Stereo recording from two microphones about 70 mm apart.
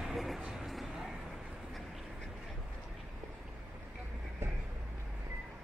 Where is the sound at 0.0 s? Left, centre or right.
Centre.